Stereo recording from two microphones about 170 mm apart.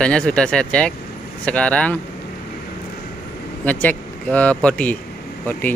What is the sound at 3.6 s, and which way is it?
Speech, 10° left (ahead or behind).